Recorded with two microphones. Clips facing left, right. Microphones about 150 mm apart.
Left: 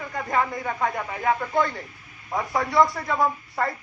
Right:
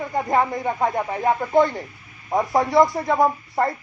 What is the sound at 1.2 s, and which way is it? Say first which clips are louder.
A woman's voice: right 5 dB; 20° right (ahead or behind).